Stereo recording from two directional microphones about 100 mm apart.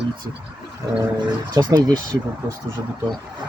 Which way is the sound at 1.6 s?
45° right (ahead or behind).